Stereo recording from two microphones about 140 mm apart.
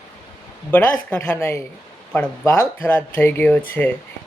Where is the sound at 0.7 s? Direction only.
10° left (ahead or behind).